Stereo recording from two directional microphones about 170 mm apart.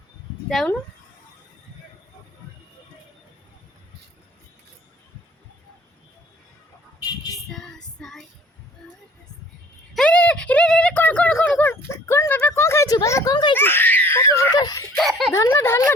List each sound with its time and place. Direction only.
0.4 s speech: centre (ahead or behind)
7.5 s child singing: 5° left (ahead or behind)
9.9 s a sound: 5° left (ahead or behind); by 13.5 s 25° left (ahead or behind)
13.6 s laughter: 10° left (ahead or behind)
14.9 s speech: 5° left (ahead or behind)
15.3 s speech: 15° left (ahead or behind)